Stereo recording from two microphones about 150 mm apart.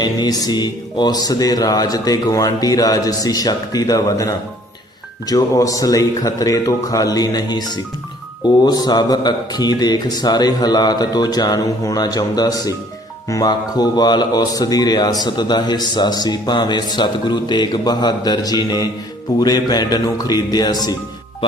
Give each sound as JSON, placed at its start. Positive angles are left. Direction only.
{"t": 0.0, "sound": "speech", "side_deg": 25}
{"t": 8.6, "sound": "speech", "side_deg": 25}